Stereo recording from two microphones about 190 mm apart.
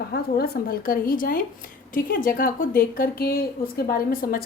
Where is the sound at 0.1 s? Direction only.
55° left (ahead or behind).